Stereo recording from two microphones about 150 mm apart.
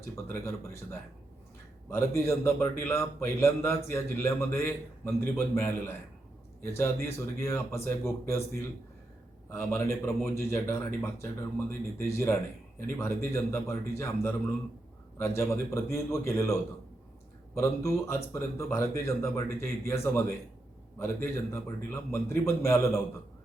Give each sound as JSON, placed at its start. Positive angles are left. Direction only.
{"t": 0.3, "sound": "a man's voice", "side_deg": 20}
{"t": 1.9, "sound": "a man's voice", "side_deg": 20}
{"t": 9.5, "sound": "a man's voice", "side_deg": 15}